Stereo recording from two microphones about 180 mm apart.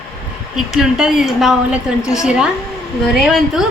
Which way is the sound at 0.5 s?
5° right (ahead or behind).